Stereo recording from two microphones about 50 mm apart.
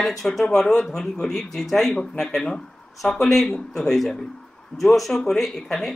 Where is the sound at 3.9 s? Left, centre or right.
Centre.